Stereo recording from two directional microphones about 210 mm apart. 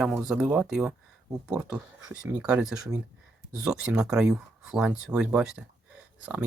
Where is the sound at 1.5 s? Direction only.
15° right (ahead or behind).